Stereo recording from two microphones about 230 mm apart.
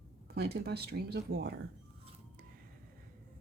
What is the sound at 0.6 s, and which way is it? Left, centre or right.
Speech, right.